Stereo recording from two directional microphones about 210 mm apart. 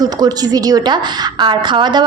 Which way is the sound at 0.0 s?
20° right (ahead or behind).